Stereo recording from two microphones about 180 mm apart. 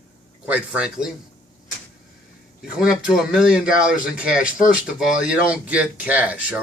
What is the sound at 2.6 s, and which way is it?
Speech, 5° right (ahead or behind).